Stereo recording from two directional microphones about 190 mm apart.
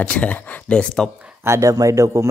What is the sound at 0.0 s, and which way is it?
Speech, 10° left (ahead or behind).